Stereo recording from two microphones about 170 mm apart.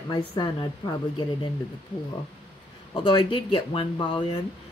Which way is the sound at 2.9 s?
30° left (ahead or behind).